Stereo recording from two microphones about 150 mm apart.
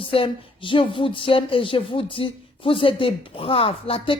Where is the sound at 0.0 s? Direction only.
35° left (ahead or behind).